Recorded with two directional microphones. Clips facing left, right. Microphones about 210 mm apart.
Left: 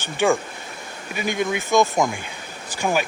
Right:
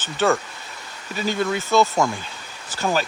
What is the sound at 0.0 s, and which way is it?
Speech, 15° left (ahead or behind).